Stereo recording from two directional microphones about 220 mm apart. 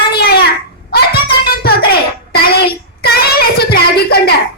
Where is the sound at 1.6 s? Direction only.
45° left (ahead or behind).